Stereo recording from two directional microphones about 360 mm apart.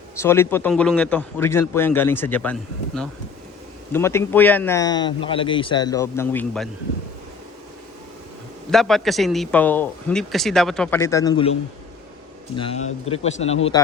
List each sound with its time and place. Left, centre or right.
0.2 s a man's voice: centre
8.7 s speech: centre
12.5 s a man's voice: centre
13.4 s a man's voice: left